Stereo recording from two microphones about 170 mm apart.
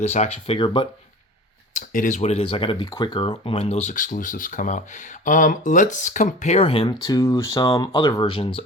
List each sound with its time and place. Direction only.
0.0 s speech: 40° left (ahead or behind)
1.7 s speech: 50° left (ahead or behind); by 6.9 s 35° left (ahead or behind)
7.0 s speech: 20° left (ahead or behind)